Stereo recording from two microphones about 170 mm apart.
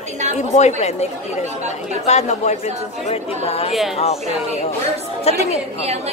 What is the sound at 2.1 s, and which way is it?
A woman's voice, 40° left (ahead or behind).